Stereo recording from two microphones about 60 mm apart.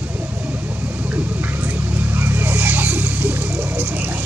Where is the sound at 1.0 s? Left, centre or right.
Right.